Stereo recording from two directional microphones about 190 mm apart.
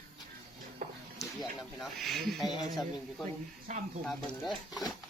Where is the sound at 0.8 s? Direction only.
40° right (ahead or behind).